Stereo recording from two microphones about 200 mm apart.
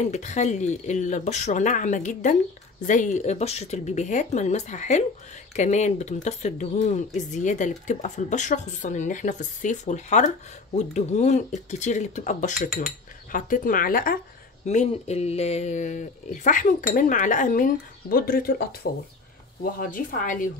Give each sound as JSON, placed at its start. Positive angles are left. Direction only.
{"t": 0.0, "sound": "speech", "side_deg": 35}